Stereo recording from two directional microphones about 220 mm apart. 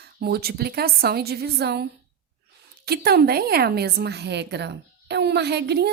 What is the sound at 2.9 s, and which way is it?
A woman's voice, 45° right (ahead or behind).